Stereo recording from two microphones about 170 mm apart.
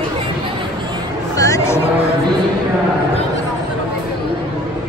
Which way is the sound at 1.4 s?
20° left (ahead or behind).